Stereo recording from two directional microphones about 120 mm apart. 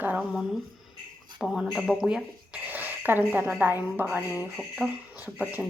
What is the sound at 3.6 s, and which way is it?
Speech, 15° right (ahead or behind).